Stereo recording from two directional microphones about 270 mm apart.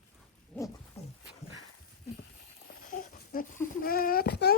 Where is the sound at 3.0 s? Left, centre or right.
Left.